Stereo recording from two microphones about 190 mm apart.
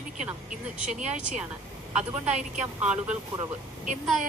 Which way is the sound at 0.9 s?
40° right (ahead or behind).